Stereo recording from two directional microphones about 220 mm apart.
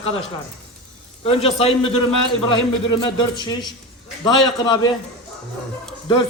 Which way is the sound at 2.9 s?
20° left (ahead or behind).